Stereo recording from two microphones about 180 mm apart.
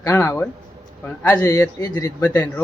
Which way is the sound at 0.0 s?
15° left (ahead or behind).